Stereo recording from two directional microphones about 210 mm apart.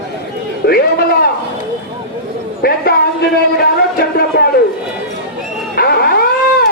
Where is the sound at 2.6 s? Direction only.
45° left (ahead or behind).